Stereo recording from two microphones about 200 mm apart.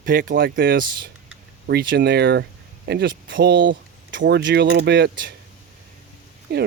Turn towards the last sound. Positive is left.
turn(degrees=-50)  # may be behind; listen again after turning